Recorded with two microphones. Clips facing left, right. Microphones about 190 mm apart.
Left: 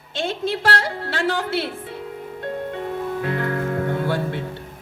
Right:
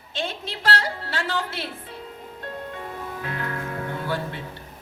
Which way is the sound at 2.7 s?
55° left (ahead or behind).